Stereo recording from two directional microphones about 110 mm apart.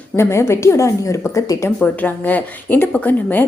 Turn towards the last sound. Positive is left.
turn(degrees=15)  # may be behind; listen again after turning